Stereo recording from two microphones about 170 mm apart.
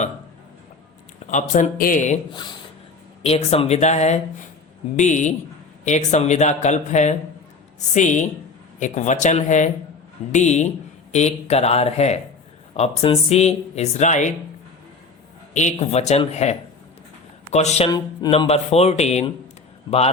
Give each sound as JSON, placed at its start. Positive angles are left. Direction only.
{"t": 1.3, "sound": "speech", "side_deg": 45}
{"t": 3.2, "sound": "speech", "side_deg": 35}
{"t": 15.5, "sound": "speech", "side_deg": 45}
{"t": 17.8, "sound": "speech", "side_deg": 25}
{"t": 18.3, "sound": "speech", "side_deg": 35}